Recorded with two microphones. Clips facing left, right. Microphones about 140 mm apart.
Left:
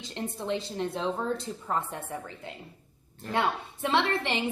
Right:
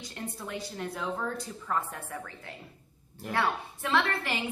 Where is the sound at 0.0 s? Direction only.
25° left (ahead or behind).